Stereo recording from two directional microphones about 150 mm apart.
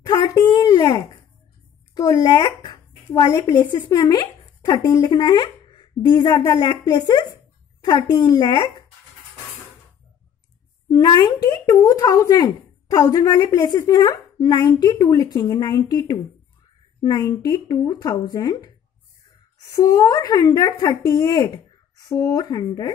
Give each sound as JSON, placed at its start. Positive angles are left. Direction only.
{"t": 0.0, "sound": "a sound", "side_deg": 30}
{"t": 3.1, "sound": "speech", "side_deg": 30}
{"t": 10.9, "sound": "speech", "side_deg": 25}
{"t": 19.7, "sound": "speech", "side_deg": 25}